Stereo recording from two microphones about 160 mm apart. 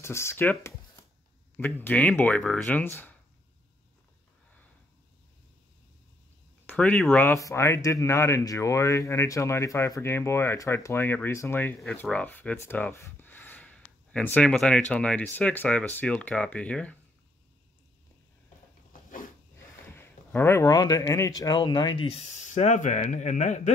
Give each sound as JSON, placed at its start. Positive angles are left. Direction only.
{"t": 0.0, "sound": "speech", "side_deg": 15}
{"t": 6.6, "sound": "speech", "side_deg": 10}
{"t": 20.2, "sound": "speech", "side_deg": 15}
{"t": 22.1, "sound": "speech", "side_deg": 45}